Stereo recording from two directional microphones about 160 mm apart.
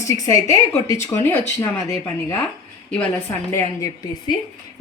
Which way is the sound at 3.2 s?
20° left (ahead or behind).